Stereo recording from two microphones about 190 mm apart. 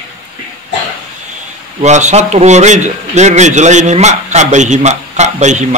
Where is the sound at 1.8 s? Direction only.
40° right (ahead or behind).